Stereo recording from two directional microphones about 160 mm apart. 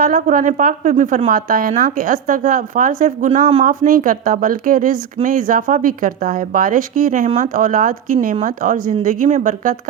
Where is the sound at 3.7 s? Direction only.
60° right (ahead or behind).